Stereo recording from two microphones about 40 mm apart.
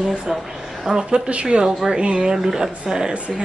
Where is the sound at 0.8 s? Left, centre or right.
Centre.